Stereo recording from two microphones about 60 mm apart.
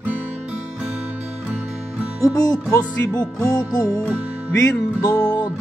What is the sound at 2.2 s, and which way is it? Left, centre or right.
Music, left.